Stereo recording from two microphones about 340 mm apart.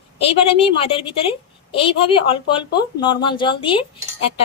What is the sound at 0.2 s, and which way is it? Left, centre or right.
A woman's voice, centre.